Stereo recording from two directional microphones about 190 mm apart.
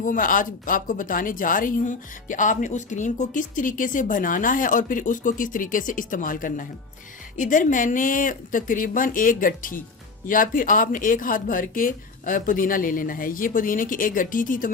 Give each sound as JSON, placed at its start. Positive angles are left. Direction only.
{"t": 0.0, "sound": "speech", "side_deg": 45}